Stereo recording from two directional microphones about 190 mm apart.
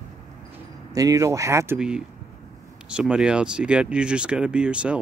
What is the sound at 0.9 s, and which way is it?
Speech, 20° right (ahead or behind).